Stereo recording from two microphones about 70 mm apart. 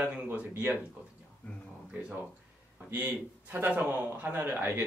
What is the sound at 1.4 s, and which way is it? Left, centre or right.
Speech, left.